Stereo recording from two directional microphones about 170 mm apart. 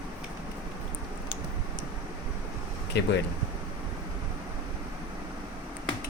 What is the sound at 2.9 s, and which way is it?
Speech, 85° left.